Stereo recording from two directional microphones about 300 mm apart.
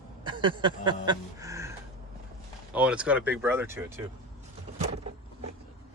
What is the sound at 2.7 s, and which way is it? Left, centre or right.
Speech, centre.